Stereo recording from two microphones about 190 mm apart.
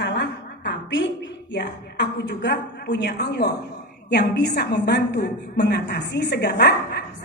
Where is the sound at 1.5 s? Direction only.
65° left (ahead or behind).